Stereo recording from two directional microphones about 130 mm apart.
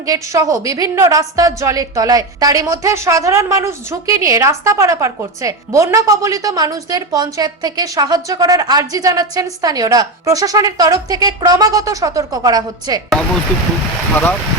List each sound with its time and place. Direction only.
0.0 s a woman's voice: 25° right (ahead or behind)